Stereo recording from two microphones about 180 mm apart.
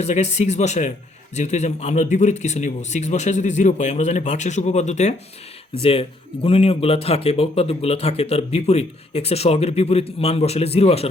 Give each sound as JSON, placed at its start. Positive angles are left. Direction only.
{"t": 0.0, "sound": "speech", "side_deg": 40}